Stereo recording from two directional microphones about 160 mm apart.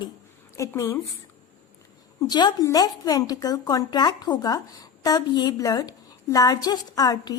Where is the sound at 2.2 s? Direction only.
25° left (ahead or behind).